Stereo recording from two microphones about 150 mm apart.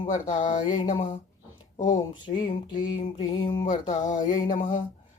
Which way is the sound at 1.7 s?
55° left (ahead or behind).